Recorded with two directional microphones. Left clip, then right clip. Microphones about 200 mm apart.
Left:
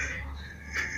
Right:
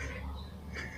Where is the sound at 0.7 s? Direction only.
Centre (ahead or behind).